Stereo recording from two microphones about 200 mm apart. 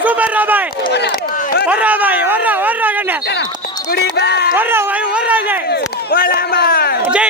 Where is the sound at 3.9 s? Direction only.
55° left (ahead or behind).